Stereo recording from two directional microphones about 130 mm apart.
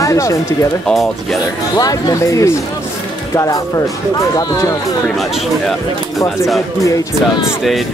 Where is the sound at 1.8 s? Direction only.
30° left (ahead or behind).